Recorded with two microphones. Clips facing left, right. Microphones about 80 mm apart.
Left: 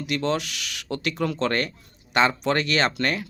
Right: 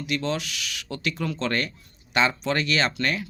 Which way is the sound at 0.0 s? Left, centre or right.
Left.